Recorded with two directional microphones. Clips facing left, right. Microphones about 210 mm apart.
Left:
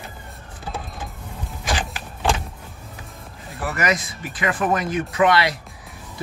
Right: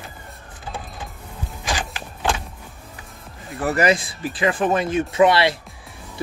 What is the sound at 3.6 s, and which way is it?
Speech, 30° right (ahead or behind).